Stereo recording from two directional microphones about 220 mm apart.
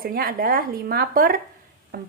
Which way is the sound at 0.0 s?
40° right (ahead or behind).